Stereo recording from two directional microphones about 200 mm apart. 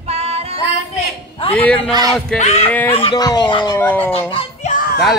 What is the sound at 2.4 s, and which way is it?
Speech, 35° left (ahead or behind).